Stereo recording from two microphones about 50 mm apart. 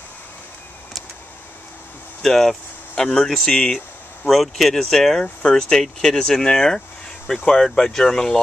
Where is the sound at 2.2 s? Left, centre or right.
Centre.